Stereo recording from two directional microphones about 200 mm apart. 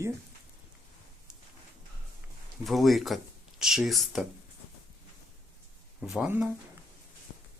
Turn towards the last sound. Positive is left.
turn(degrees=-5)  # may be behind; listen again after turning